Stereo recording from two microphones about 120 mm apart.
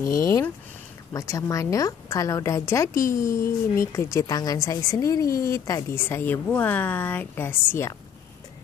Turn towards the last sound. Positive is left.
turn(degrees=20)  # may be behind; listen again after turning